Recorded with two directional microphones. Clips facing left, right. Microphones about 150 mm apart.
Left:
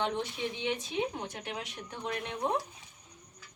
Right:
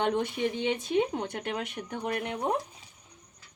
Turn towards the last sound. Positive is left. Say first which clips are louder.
# right 3 dB
turn(degrees=-55)  # may be behind; listen again after turning